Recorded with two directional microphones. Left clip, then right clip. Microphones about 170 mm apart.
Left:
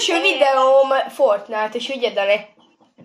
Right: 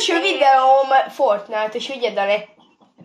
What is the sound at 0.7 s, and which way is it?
Speech, 15° left (ahead or behind).